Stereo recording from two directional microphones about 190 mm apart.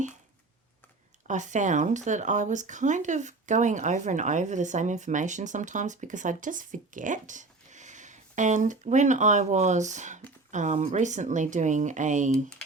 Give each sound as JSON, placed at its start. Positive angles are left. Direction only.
{"t": 1.3, "sound": "speech", "side_deg": -40}